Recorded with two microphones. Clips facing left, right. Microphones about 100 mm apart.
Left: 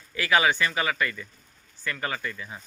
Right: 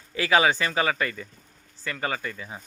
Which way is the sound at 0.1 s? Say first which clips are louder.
Right 2 dB; 30° right (ahead or behind).